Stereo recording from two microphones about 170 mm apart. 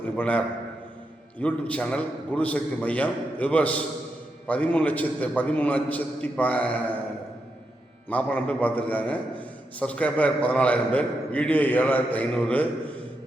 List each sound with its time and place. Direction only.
0.2 s a man's voice: 10° left (ahead or behind)
8.1 s a man's voice: 10° left (ahead or behind)